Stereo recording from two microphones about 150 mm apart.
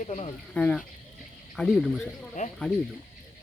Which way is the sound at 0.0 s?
55° left (ahead or behind).